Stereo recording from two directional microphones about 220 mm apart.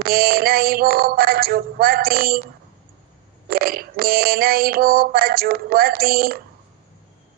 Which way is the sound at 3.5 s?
45° right (ahead or behind).